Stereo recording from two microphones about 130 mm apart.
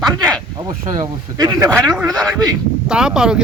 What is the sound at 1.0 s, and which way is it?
Speech, 30° right (ahead or behind).